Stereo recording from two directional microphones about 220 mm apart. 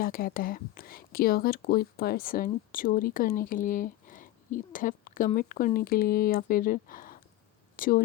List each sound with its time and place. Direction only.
0.0 s speech: 40° left (ahead or behind)